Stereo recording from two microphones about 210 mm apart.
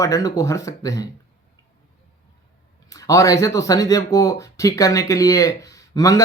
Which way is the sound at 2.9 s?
15° left (ahead or behind).